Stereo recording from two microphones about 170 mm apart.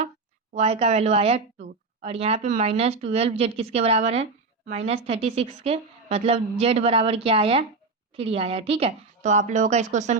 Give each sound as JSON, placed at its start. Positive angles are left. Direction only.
{"t": 0.5, "sound": "a woman's voice", "side_deg": -40}